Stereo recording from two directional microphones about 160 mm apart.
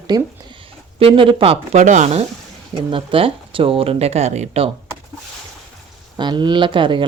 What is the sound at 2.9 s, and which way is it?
Speech, 35° right (ahead or behind).